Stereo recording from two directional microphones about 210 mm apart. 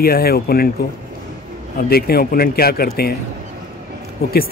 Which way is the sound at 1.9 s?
45° left (ahead or behind).